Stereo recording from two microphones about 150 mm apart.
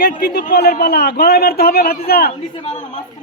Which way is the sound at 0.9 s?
90° left.